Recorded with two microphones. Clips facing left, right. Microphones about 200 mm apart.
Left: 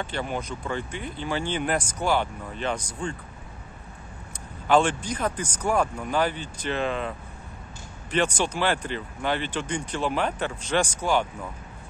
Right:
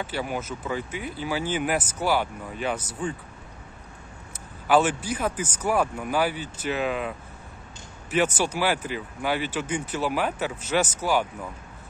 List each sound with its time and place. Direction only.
0.0 s speech: 5° right (ahead or behind)
4.6 s speech: 5° right (ahead or behind)